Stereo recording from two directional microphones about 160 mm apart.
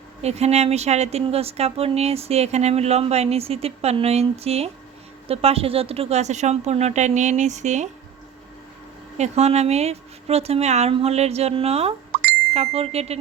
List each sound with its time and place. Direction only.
0.2 s a woman's voice: 40° right (ahead or behind)
9.1 s speech: 45° right (ahead or behind)